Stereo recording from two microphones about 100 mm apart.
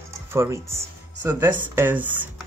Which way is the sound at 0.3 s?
30° right (ahead or behind).